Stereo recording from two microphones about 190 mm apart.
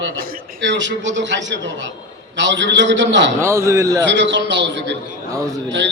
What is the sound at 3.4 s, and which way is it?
Speech, 15° right (ahead or behind).